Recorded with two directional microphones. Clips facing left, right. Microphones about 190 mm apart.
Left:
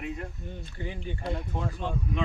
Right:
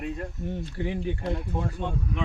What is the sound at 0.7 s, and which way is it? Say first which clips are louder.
Speech: right 6 dB; 65° right (ahead or behind).